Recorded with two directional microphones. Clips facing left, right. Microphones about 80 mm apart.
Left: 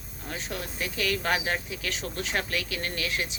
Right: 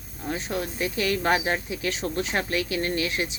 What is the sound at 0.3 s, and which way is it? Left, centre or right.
Speech, right.